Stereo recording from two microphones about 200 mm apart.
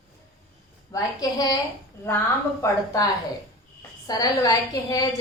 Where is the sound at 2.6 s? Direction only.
15° left (ahead or behind).